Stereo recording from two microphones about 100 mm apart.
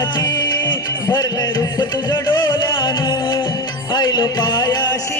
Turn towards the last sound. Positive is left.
turn(degrees=45)  # may be behind; listen again after turning